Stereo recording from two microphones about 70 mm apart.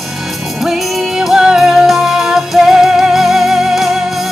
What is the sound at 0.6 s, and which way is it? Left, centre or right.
Music, centre.